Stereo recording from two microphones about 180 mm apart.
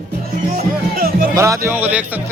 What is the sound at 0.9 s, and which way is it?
Music, 55° right (ahead or behind).